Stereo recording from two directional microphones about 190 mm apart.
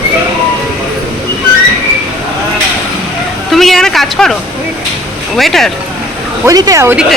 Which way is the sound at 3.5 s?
Centre (ahead or behind).